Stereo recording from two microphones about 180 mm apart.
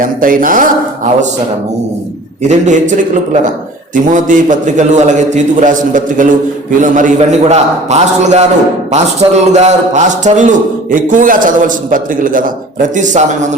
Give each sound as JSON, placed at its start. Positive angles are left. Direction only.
{"t": 0.0, "sound": "a man's voice", "side_deg": -50}
{"t": 2.5, "sound": "a man's voice", "side_deg": -45}
{"t": 4.1, "sound": "a man's voice", "side_deg": -45}